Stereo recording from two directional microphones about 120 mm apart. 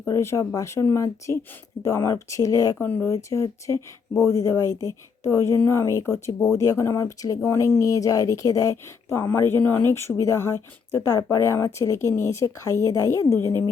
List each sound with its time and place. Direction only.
0.0 s speech: 25° left (ahead or behind)
2.7 s speech: 15° left (ahead or behind)